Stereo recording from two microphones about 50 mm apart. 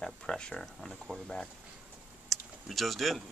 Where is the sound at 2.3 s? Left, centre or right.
Centre.